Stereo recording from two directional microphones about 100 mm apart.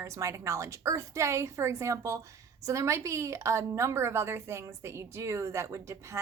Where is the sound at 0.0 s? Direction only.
30° right (ahead or behind).